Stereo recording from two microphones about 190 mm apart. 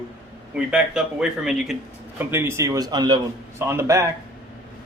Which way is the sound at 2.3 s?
15° right (ahead or behind).